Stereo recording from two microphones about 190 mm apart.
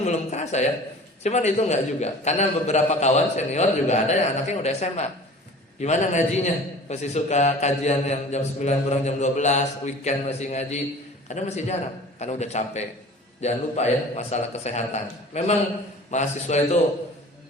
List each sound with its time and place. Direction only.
0.0 s a man's voice: 35° left (ahead or behind)